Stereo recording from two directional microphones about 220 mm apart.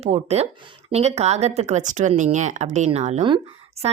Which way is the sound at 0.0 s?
30° right (ahead or behind).